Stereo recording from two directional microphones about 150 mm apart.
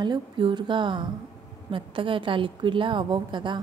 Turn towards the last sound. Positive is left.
turn(degrees=-30)  # may be behind; listen again after turning